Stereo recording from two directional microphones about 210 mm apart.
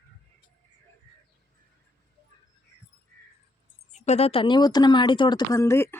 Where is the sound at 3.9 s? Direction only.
30° left (ahead or behind).